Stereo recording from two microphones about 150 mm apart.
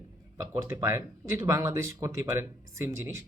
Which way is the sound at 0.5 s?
20° right (ahead or behind).